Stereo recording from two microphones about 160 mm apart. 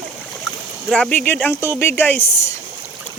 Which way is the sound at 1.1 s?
10° left (ahead or behind).